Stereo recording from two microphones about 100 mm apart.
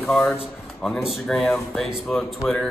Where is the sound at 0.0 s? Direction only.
5° left (ahead or behind).